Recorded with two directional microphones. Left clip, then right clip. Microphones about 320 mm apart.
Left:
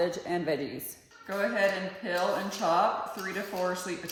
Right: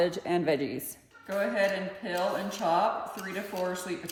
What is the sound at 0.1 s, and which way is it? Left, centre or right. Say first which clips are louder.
Speech: right 2 dB; right.